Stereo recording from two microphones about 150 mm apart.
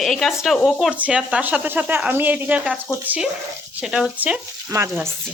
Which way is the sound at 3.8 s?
5° right (ahead or behind).